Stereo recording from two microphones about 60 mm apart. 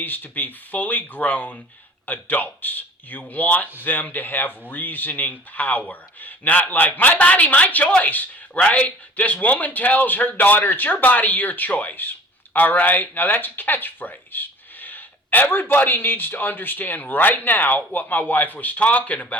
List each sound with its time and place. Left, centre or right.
0.0 s speech: left